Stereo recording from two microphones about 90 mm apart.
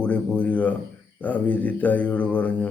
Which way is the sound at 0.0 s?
15° left (ahead or behind).